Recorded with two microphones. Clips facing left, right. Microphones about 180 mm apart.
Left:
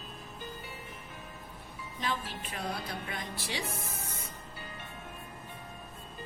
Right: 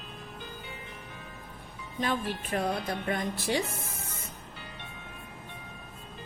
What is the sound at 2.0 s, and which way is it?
Speech, 55° right (ahead or behind).